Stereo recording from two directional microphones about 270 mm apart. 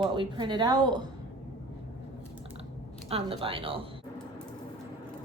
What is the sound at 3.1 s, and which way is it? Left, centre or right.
Speech, right.